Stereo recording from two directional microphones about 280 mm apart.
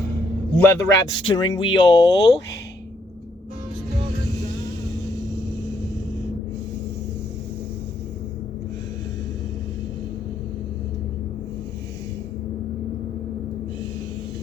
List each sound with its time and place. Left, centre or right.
0.5 s a man's voice: centre